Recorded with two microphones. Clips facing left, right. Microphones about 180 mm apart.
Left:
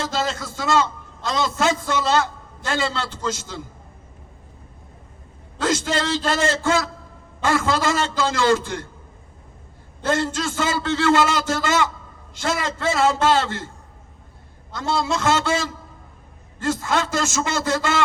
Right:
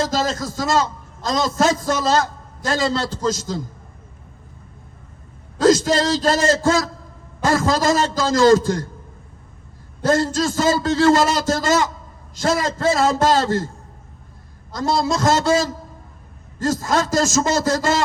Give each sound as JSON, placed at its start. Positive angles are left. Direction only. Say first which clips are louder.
{"t": 0.0, "sound": "a man's voice", "louder": "right 4 dB", "side_deg": -40}
{"t": 5.5, "sound": "a man's voice", "louder": "right 7 dB", "side_deg": -40}
{"t": 10.0, "sound": "a man's voice", "louder": "right 4 dB", "side_deg": -40}
{"t": 14.7, "sound": "a man's voice", "louder": "right 3 dB", "side_deg": -40}